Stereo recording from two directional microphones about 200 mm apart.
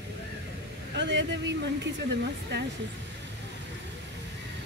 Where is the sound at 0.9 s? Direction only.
60° right (ahead or behind).